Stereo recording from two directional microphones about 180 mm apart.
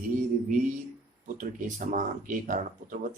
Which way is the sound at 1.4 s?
45° right (ahead or behind).